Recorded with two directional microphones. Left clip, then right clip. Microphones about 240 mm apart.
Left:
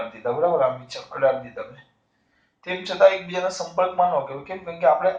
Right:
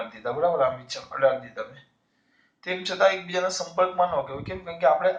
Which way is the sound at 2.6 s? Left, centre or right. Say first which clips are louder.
Left 5 dB; right.